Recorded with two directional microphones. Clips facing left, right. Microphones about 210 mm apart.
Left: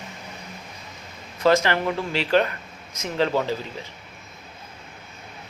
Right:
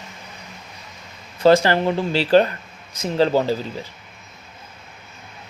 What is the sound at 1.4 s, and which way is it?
Speech, 30° right (ahead or behind).